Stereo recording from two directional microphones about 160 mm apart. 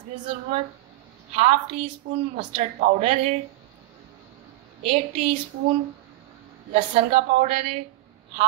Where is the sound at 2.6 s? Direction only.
50° right (ahead or behind).